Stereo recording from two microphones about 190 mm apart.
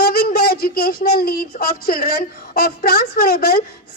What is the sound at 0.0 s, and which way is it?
A child's voice, 55° left (ahead or behind).